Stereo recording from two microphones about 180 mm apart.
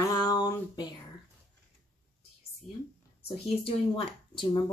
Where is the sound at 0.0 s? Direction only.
20° left (ahead or behind).